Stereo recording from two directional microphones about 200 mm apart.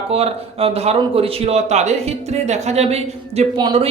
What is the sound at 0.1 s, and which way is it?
Speech, 30° right (ahead or behind).